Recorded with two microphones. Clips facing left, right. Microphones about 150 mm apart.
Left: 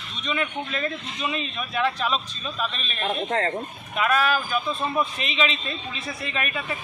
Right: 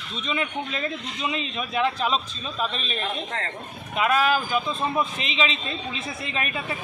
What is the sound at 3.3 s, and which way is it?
Speech, 40° left (ahead or behind).